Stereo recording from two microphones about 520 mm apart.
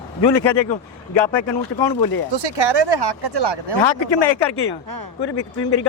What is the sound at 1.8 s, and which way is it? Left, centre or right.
Speech, left.